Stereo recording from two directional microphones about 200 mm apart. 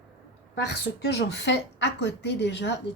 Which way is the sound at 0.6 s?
55° left (ahead or behind).